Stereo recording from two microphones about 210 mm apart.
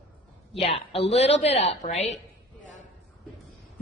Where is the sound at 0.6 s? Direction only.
30° left (ahead or behind).